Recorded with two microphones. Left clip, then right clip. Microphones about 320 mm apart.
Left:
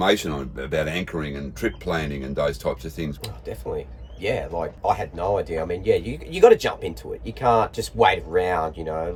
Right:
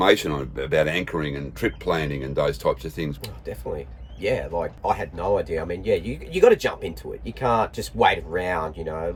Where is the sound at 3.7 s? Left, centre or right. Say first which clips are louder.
Left 3 dB; centre.